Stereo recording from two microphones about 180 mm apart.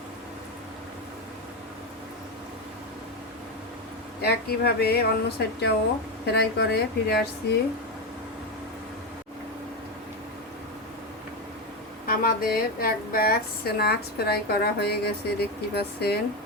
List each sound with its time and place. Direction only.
4.2 s a woman's voice: 60° left (ahead or behind)
12.0 s a woman's voice: 55° left (ahead or behind)